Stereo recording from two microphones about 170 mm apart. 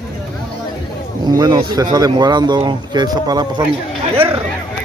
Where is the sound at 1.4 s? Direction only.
20° right (ahead or behind).